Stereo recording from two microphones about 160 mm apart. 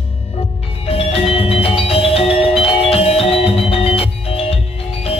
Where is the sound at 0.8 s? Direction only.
35° left (ahead or behind).